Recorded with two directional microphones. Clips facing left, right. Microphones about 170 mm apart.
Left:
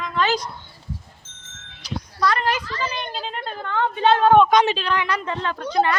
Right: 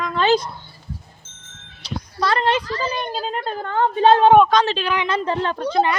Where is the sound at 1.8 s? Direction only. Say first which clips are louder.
Right 1 dB; 30° right (ahead or behind).